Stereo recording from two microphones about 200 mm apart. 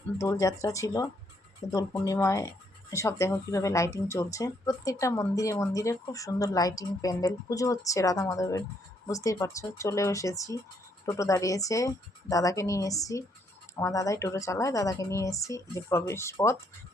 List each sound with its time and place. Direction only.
0.2 s speech: 15° left (ahead or behind)